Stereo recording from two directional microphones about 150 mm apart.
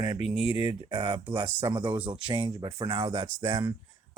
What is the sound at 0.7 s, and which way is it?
Speech, 35° right (ahead or behind).